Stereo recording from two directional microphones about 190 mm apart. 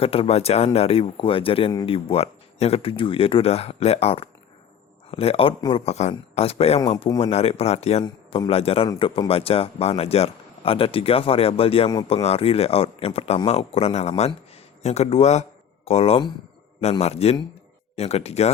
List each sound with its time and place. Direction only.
0.0 s speech: 30° left (ahead or behind)